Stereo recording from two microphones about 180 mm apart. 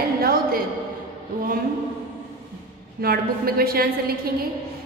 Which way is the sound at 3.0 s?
55° right (ahead or behind).